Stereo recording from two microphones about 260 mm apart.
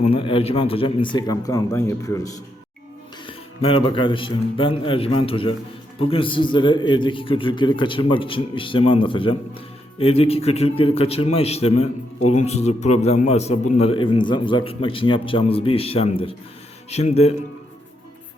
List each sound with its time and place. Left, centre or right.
0.0 s a man's voice: centre